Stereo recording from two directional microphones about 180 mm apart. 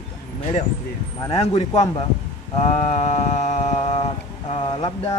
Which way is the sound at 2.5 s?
35° left (ahead or behind).